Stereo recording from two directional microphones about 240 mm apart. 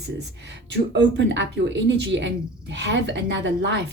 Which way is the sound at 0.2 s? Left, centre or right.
Right.